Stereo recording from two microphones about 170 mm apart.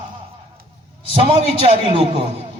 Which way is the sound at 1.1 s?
35° right (ahead or behind).